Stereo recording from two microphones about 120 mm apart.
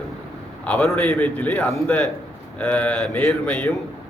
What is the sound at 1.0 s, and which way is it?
Speech, 15° left (ahead or behind).